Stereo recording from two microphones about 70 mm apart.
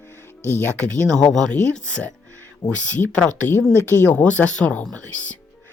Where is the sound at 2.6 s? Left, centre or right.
Left.